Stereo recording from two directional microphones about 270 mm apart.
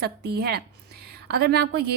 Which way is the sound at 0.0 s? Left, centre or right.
Right.